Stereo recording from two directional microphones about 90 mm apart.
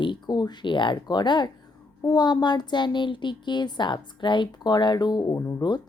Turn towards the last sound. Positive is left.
turn(degrees=40)  # may be behind; listen again after turning